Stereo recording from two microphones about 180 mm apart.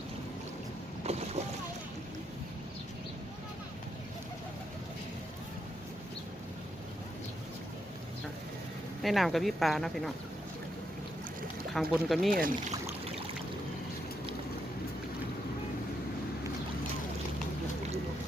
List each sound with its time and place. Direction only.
1.0 s boat: 35° right (ahead or behind)
9.0 s speech: centre (ahead or behind)
11.7 s speech: centre (ahead or behind)
12.3 s speech: 50° right (ahead or behind)